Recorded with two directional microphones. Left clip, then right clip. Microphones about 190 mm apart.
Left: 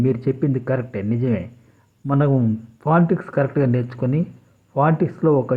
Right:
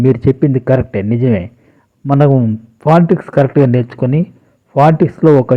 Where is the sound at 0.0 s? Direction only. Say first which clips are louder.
Right 9 dB; 30° right (ahead or behind).